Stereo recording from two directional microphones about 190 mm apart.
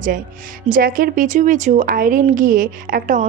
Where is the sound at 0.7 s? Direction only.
50° right (ahead or behind).